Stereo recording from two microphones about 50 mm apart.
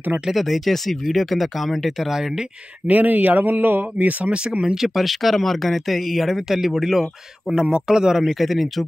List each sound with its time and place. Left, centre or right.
0.3 s speech: centre
2.9 s speech: right
4.2 s speech: centre
4.8 s a man's voice: centre